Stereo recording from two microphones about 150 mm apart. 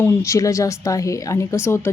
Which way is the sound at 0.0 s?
15° left (ahead or behind).